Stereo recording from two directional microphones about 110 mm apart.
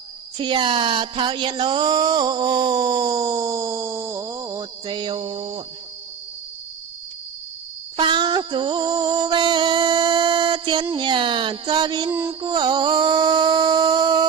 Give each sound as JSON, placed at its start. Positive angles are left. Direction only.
{"t": 0.3, "sound": "speech", "side_deg": -45}
{"t": 7.9, "sound": "music", "side_deg": -45}